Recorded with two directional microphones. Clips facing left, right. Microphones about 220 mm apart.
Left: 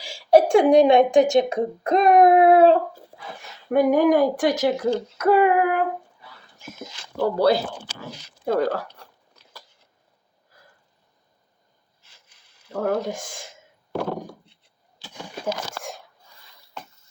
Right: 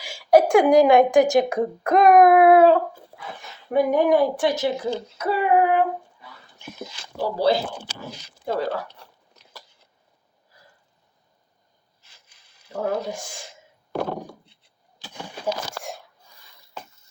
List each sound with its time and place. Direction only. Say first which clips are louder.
0.0 s a sound: even; 30° left (ahead or behind)
3.7 s speech: left 2 dB; 50° left (ahead or behind)
7.2 s speech: left 2 dB; 60° left (ahead or behind)
12.7 s speech: left 2 dB; 50° left (ahead or behind)